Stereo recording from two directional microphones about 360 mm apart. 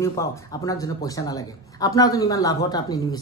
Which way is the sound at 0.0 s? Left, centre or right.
Centre.